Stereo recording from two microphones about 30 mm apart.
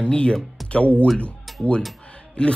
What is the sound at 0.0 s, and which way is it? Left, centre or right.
Speech, left.